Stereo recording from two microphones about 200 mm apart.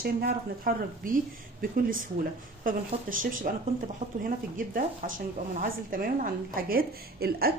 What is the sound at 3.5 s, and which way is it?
A woman's voice, 45° right (ahead or behind).